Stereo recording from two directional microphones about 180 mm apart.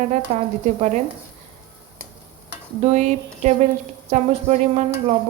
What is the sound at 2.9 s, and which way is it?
Speech, 40° right (ahead or behind).